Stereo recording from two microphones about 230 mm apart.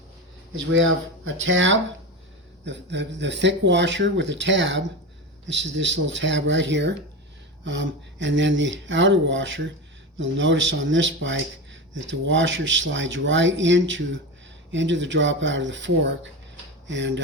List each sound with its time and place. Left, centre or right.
0.7 s speech: right